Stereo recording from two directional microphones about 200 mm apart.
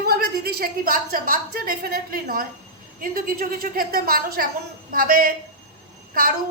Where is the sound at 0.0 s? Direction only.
50° right (ahead or behind).